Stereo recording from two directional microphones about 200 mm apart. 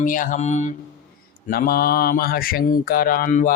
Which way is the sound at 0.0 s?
40° left (ahead or behind).